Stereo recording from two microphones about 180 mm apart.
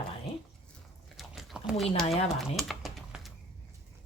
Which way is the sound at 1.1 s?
Centre (ahead or behind).